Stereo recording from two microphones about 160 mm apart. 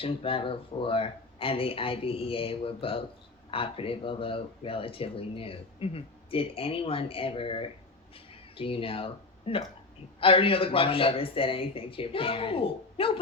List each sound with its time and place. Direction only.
0.0 s speech: 35° left (ahead or behind)